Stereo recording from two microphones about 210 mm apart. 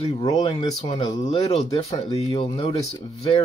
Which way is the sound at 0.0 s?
20° left (ahead or behind).